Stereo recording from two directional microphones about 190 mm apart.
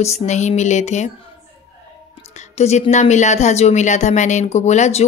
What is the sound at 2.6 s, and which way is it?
Speech, 35° left (ahead or behind).